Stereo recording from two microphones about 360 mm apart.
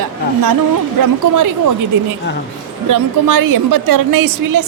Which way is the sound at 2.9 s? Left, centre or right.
Right.